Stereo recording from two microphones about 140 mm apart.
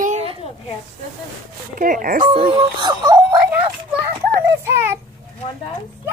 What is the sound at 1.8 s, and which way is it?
Speech, 75° right (ahead or behind).